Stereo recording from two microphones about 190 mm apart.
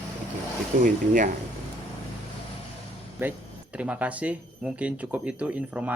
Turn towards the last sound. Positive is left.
turn(degrees=-5)  # may be behind; listen again after turning